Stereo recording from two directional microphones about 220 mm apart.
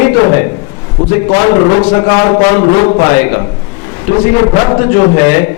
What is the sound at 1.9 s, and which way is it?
A man's voice, 20° left (ahead or behind).